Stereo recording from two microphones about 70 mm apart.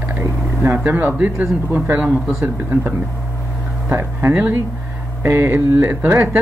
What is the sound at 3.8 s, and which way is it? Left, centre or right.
Speech, right.